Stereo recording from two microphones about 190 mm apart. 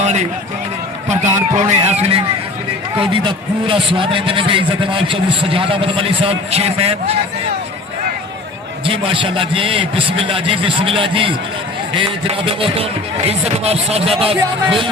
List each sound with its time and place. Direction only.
0.0 s a sound: 35° right (ahead or behind)
1.0 s music: 40° right (ahead or behind)
1.4 s a man's voice: 35° right (ahead or behind)
8.9 s a man's voice: 30° right (ahead or behind)